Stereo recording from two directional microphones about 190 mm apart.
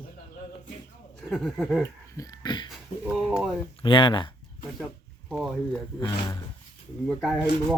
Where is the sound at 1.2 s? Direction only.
Centre (ahead or behind).